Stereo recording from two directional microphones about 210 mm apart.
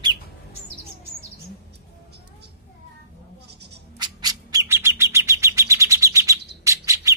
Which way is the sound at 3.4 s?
50° right (ahead or behind).